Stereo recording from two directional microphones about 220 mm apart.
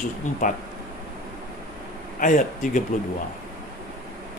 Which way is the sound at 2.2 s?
35° left (ahead or behind).